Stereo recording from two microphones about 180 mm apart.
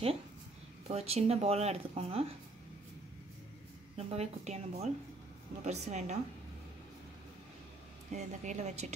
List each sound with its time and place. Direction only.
0.8 s speech: 35° right (ahead or behind)
3.9 s speech: 35° right (ahead or behind)
8.1 s speech: 40° right (ahead or behind)